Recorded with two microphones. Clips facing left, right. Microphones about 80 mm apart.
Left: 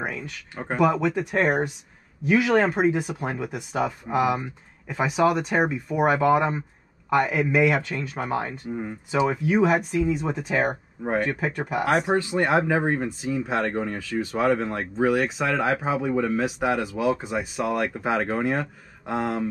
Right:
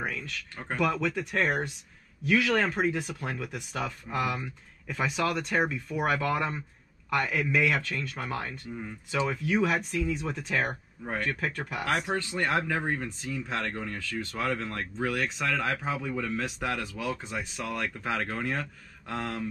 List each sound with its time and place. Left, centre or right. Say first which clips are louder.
0.0 s speech: left 3 dB; centre